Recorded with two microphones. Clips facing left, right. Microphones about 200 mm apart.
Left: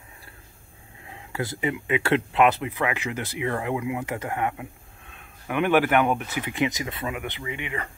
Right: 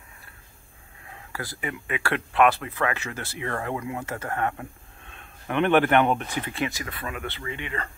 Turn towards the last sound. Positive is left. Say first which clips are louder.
# left 1 dB
turn(degrees=15)  # may be behind; listen again after turning